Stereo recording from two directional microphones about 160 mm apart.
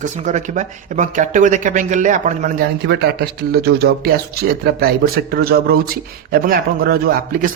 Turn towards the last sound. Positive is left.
turn(degrees=-65)  # may be behind; listen again after turning